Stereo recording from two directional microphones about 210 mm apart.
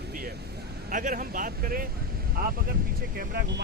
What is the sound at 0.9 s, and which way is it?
Speech, 40° right (ahead or behind).